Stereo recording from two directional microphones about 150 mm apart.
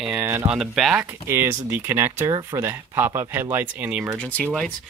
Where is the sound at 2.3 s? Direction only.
30° right (ahead or behind).